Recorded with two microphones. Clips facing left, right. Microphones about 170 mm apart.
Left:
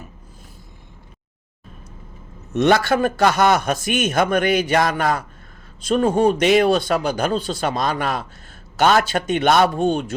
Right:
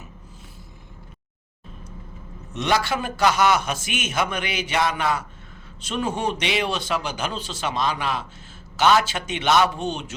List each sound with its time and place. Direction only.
2.6 s a man's voice: 50° left (ahead or behind)